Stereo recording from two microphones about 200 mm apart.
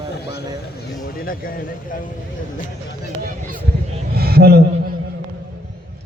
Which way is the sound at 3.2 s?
40° right (ahead or behind).